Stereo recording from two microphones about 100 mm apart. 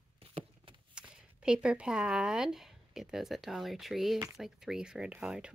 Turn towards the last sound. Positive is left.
turn(degrees=-10)  # may be behind; listen again after turning